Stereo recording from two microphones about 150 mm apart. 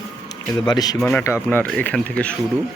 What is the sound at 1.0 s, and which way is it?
Speech, 15° left (ahead or behind).